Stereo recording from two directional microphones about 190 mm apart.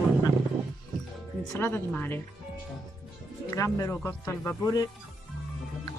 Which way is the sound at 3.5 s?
15° left (ahead or behind).